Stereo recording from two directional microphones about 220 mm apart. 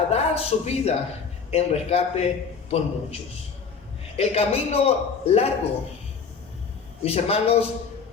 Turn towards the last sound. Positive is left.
turn(degrees=25)  # may be behind; listen again after turning